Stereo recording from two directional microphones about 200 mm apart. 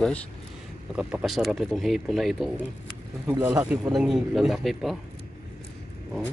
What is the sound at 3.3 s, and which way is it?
Speech, 20° right (ahead or behind).